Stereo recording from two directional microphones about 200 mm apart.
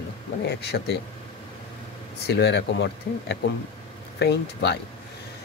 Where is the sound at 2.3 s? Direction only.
55° left (ahead or behind).